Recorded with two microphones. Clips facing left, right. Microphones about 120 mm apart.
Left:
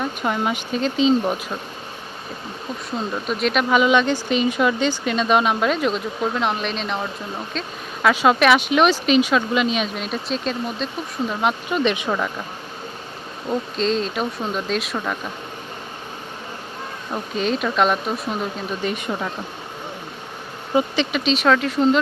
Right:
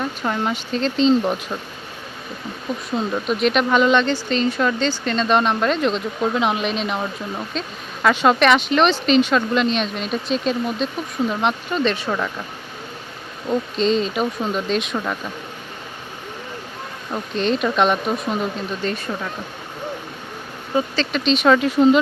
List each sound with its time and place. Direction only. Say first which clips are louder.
0.0 s speech: even; 10° left (ahead or behind)
2.7 s speech: right 4 dB; 5° right (ahead or behind)
11.8 s speech: even; 15° left (ahead or behind)
13.5 s speech: right 3 dB; centre (ahead or behind)
17.3 s speech: right 2 dB; 5° left (ahead or behind)
18.8 s speech: left 3 dB; 15° left (ahead or behind)
20.7 s speech: left 1 dB; 15° left (ahead or behind)
21.2 s speech: right 4 dB; centre (ahead or behind)